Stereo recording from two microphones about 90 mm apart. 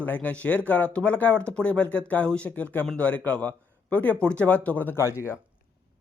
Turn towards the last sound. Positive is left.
turn(degrees=30)  # may be behind; listen again after turning